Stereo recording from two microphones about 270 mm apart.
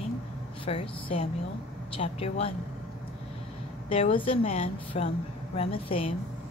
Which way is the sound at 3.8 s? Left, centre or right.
Left.